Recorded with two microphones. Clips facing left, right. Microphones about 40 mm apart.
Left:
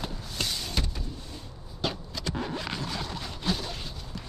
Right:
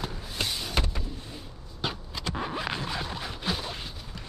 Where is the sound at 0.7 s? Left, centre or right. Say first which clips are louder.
Right 3 dB; right.